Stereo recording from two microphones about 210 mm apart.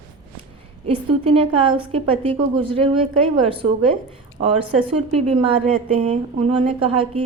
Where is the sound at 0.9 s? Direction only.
30° right (ahead or behind).